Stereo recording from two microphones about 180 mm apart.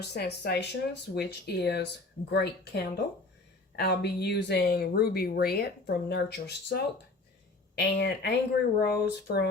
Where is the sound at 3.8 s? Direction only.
65° left (ahead or behind).